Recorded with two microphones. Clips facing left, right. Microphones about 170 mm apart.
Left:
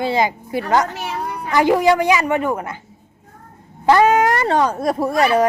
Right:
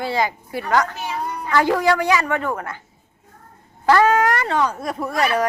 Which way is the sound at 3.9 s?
20° left (ahead or behind).